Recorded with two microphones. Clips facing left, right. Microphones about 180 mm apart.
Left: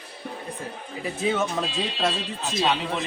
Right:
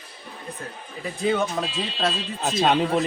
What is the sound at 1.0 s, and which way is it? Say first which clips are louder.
Speech: right 2 dB; centre (ahead or behind).